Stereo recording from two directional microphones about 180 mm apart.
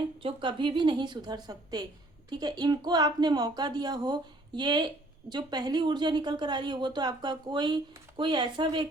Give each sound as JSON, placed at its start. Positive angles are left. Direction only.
{"t": 0.2, "sound": "speech", "side_deg": -30}